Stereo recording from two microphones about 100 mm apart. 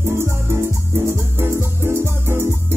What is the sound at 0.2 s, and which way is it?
Music, 25° right (ahead or behind).